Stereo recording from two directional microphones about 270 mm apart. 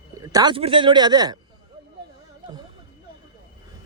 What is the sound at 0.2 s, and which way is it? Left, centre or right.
Speech, centre.